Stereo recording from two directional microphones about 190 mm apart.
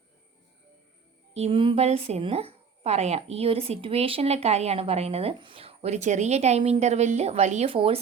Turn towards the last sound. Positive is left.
turn(degrees=-30)  # may be behind; listen again after turning